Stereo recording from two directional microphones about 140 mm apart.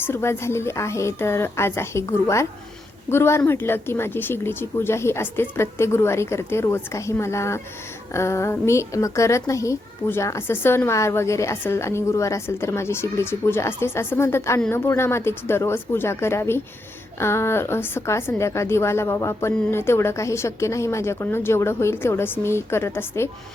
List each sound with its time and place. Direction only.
0.0 s a woman's voice: 20° left (ahead or behind)